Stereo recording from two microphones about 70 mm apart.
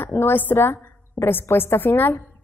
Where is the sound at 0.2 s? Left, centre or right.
Left.